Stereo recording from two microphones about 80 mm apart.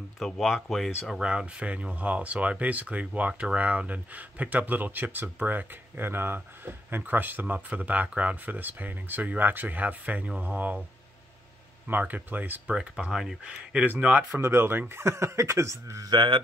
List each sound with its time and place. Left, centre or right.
0.2 s speech: centre
1.2 s speech: centre
11.9 s speech: right
14.3 s speech: right
16.1 s speech: right